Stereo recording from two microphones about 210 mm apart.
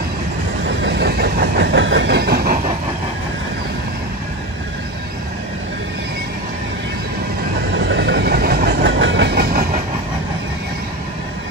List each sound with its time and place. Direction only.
0.7 s train: 55° right (ahead or behind)
7.7 s train: 55° right (ahead or behind)